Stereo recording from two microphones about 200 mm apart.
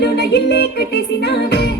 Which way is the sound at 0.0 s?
55° left (ahead or behind).